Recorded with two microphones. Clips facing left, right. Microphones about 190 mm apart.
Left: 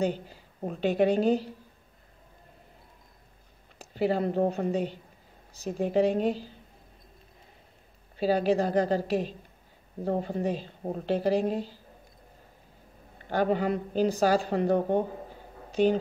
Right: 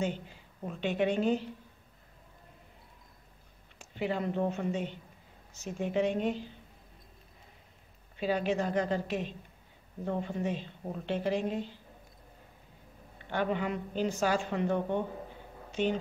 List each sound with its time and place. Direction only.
0.0 s a woman's voice: 40° left (ahead or behind)
3.7 s a woman's voice: 35° left (ahead or behind)
8.2 s a woman's voice: 35° left (ahead or behind)
13.2 s a woman's voice: 40° left (ahead or behind)